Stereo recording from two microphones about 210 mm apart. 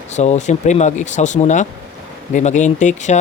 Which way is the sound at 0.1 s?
35° left (ahead or behind).